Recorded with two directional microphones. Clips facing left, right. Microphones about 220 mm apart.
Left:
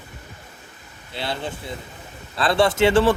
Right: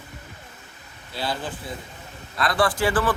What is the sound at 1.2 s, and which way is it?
A man's voice, 25° left (ahead or behind).